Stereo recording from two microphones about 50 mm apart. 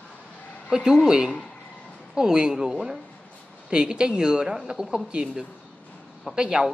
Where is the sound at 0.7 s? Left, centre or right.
Centre.